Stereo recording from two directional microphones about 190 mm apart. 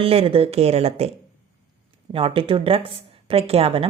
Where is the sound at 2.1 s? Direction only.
30° right (ahead or behind).